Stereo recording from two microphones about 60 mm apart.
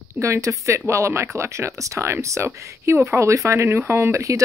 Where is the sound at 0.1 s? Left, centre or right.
Right.